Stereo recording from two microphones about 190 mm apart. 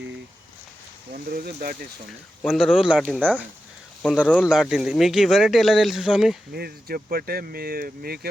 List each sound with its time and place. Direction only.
1.1 s speech: 50° right (ahead or behind)
2.4 s speech: centre (ahead or behind)
6.5 s speech: 55° right (ahead or behind)